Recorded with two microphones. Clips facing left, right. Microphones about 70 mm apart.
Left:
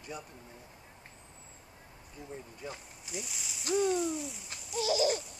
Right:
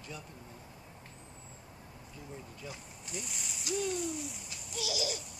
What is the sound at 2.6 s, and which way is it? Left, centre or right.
Speech, left.